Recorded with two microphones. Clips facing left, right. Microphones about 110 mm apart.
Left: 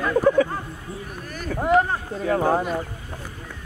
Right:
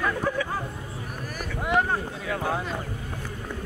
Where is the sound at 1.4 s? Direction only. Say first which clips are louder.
Left 6 dB; 40° left (ahead or behind).